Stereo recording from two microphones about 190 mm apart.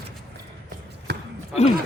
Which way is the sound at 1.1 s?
60° right (ahead or behind).